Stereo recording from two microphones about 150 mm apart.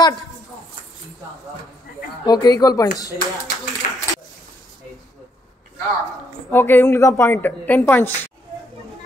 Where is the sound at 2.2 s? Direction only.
25° left (ahead or behind).